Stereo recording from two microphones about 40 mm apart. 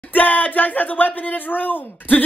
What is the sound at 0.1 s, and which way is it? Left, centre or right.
A man's voice, left.